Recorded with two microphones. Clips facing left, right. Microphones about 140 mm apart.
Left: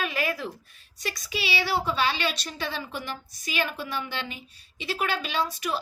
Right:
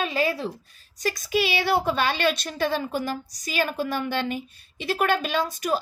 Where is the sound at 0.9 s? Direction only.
45° right (ahead or behind).